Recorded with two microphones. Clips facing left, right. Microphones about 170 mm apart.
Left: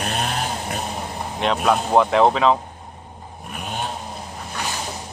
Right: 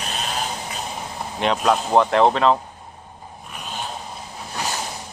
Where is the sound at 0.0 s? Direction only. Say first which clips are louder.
Left 5 dB; 60° left (ahead or behind).